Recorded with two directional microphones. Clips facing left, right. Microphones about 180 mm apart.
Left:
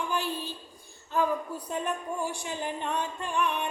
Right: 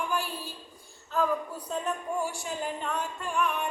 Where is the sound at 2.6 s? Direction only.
20° left (ahead or behind).